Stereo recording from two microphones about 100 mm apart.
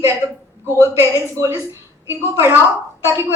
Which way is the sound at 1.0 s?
30° right (ahead or behind).